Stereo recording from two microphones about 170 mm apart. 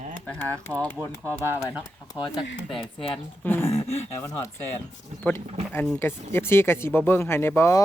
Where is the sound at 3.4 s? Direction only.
10° left (ahead or behind).